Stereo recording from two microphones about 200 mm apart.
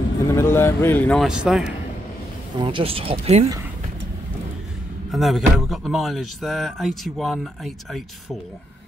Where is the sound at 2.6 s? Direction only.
25° right (ahead or behind).